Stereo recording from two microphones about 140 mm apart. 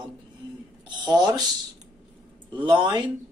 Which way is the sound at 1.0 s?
30° right (ahead or behind).